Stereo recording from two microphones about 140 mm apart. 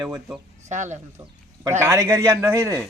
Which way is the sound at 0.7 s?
60° right (ahead or behind).